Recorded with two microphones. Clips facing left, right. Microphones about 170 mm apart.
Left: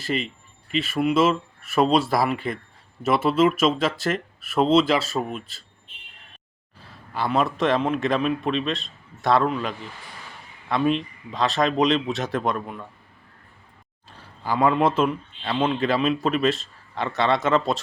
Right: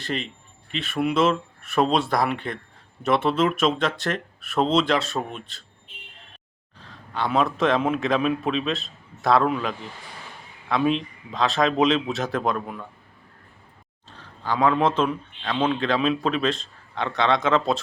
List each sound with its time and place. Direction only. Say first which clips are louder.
0.0 s speech: left 3 dB; 5° left (ahead or behind)
6.7 s a man's voice: even; 5° left (ahead or behind)
14.2 s speech: left 1 dB; 10° left (ahead or behind)